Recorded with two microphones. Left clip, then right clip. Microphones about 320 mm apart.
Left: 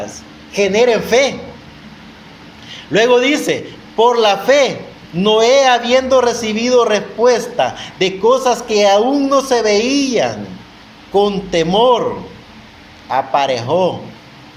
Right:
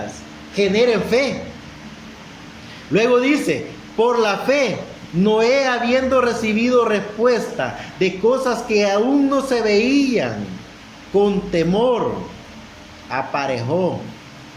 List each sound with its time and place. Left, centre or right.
0.5 s a man's voice: centre
2.9 s a man's voice: centre
11.2 s a man's voice: centre
13.1 s a man's voice: left